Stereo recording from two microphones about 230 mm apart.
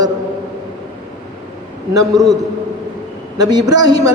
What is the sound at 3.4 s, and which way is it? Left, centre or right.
Speech, centre.